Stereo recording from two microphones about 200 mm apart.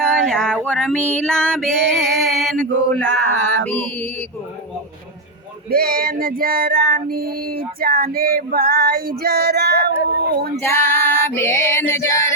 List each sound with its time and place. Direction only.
0.0 s a sound: 5° left (ahead or behind)
5.7 s female singing: 45° right (ahead or behind)
10.6 s female singing: 10° left (ahead or behind)